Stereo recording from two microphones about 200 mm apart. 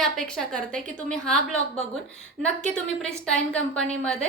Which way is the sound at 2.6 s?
5° left (ahead or behind).